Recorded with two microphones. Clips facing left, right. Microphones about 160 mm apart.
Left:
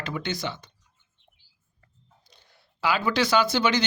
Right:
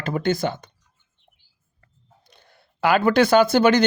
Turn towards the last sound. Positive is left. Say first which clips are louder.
# right 7 dB
turn(degrees=-50)  # may be behind; listen again after turning